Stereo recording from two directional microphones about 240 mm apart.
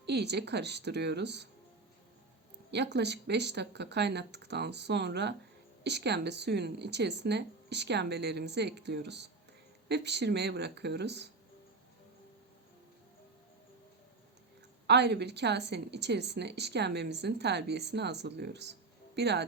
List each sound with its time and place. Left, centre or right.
0.0 s a woman's voice: right
2.7 s a woman's voice: right
14.8 s a woman's voice: right